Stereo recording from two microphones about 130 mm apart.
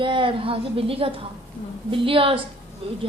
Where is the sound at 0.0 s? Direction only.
40° right (ahead or behind).